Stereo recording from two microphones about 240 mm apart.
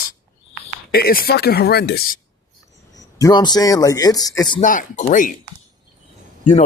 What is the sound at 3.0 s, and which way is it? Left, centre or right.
A man's voice, centre.